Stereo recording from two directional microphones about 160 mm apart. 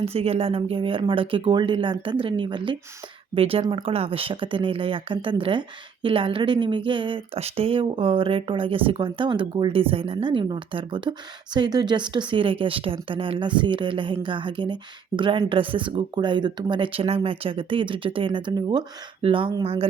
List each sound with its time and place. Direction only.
0.0 s speech: 40° right (ahead or behind)